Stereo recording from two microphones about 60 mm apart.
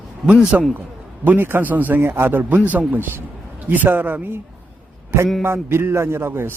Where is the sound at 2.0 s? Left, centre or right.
Right.